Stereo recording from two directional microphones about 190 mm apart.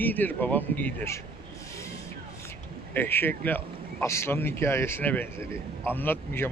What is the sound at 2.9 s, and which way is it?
A man's voice, 10° left (ahead or behind).